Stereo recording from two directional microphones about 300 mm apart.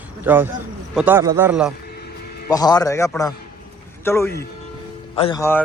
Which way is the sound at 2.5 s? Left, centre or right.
Centre.